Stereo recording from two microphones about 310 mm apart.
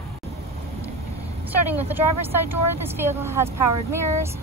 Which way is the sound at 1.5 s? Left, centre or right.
Centre.